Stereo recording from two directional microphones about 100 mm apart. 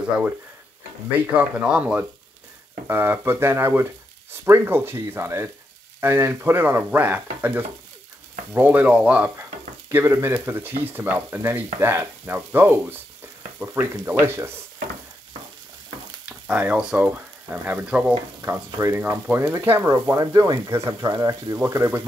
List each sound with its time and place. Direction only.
1.1 s speech: 10° right (ahead or behind)
2.9 s speech: 25° right (ahead or behind)
9.8 s speech: 25° right (ahead or behind)
16.3 s speech: 15° right (ahead or behind)
18.4 s speech: 30° right (ahead or behind)
19.9 s speech: 35° right (ahead or behind)